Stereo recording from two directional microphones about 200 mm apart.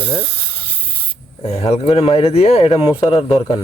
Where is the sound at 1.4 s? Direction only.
30° left (ahead or behind).